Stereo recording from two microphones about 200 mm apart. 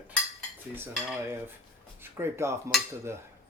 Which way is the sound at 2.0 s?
10° right (ahead or behind).